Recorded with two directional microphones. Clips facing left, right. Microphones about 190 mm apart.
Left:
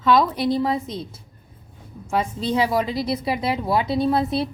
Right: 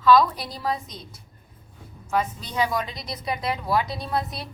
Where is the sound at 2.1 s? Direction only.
25° left (ahead or behind).